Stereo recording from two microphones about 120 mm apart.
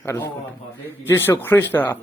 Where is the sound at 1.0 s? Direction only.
20° left (ahead or behind).